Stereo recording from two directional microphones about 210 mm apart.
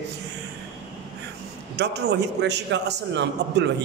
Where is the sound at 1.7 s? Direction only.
50° right (ahead or behind).